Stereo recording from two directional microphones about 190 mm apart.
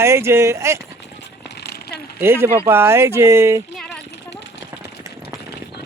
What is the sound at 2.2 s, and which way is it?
Speech, 10° right (ahead or behind).